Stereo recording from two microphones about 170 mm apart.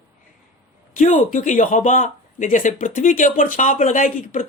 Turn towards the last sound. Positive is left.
turn(degrees=55)  # may be behind; listen again after turning